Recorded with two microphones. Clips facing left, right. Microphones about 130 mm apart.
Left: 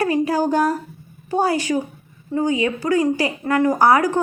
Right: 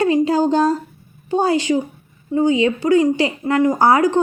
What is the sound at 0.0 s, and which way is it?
A woman's voice, 25° right (ahead or behind).